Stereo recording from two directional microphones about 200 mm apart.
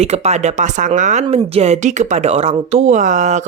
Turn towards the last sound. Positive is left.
turn(degrees=-35)  # may be behind; listen again after turning